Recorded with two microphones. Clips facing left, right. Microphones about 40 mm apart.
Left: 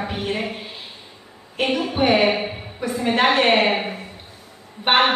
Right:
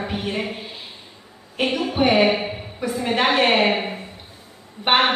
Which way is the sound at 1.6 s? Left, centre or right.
Centre.